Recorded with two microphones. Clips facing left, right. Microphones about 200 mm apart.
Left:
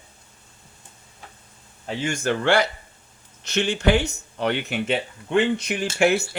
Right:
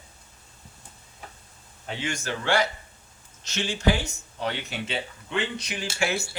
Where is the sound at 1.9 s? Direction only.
50° left (ahead or behind).